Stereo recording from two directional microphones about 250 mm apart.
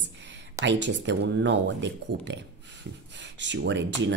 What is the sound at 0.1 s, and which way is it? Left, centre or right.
Speech, right.